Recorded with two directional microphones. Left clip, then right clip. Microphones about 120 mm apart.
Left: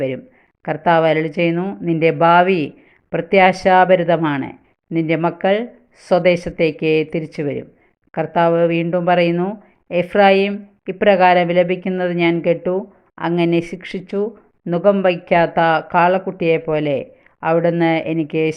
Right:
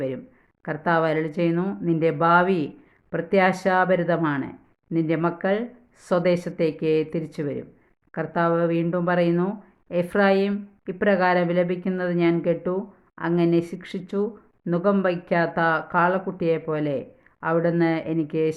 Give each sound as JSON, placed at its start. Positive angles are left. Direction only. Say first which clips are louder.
{"t": 0.6, "sound": "speech", "louder": "left 8 dB", "side_deg": 25}